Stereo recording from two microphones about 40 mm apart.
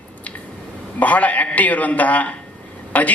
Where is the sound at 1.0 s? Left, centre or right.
Left.